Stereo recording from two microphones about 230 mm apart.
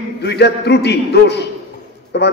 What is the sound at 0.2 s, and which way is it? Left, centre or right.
A man's voice, left.